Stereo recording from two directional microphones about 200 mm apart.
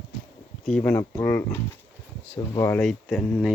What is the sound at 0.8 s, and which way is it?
Speech, 15° left (ahead or behind).